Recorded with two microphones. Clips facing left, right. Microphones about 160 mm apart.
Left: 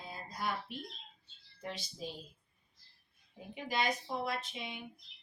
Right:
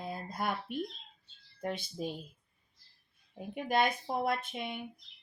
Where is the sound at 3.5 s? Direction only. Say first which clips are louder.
Right 5 dB; 55° right (ahead or behind).